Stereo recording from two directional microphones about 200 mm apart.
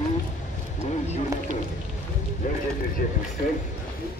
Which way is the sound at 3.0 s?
40° left (ahead or behind).